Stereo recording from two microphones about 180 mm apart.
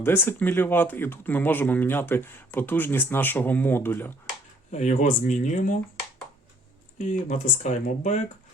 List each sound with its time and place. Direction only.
0.0 s speech: 10° left (ahead or behind)
4.7 s speech: 40° left (ahead or behind)
7.0 s speech: 40° left (ahead or behind)